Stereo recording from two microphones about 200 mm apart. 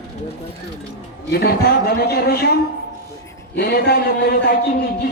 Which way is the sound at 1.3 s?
50° left (ahead or behind).